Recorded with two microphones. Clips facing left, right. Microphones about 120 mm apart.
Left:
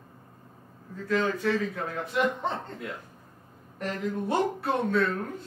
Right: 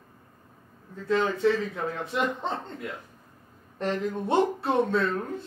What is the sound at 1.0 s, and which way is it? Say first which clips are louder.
Speech: right 3 dB; 25° right (ahead or behind).